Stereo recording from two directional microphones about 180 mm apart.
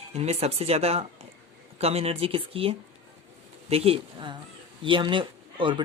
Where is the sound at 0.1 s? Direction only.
35° right (ahead or behind).